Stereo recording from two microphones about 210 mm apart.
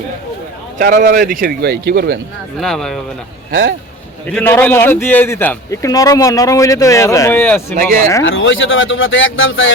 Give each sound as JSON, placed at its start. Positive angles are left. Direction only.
{"t": 0.8, "sound": "speech", "side_deg": -45}
{"t": 2.6, "sound": "speech", "side_deg": 0}
{"t": 4.3, "sound": "a man's voice", "side_deg": 10}
{"t": 8.2, "sound": "speech", "side_deg": 65}